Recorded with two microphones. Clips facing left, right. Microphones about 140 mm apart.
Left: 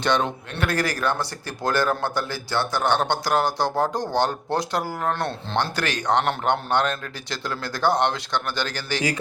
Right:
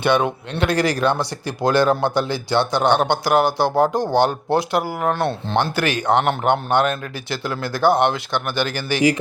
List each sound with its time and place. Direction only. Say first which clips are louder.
0.0 s a man's voice: right 4 dB; 10° right (ahead or behind)